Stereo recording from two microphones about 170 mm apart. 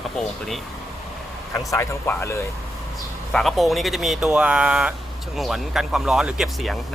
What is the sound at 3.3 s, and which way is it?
Speech, centre (ahead or behind).